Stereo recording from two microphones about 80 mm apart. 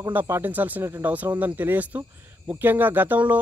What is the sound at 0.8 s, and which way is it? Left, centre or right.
Speech, right.